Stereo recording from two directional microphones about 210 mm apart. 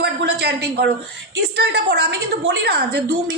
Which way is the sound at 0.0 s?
50° right (ahead or behind).